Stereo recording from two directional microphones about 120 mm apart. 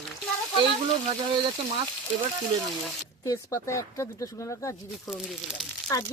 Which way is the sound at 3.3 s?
25° left (ahead or behind).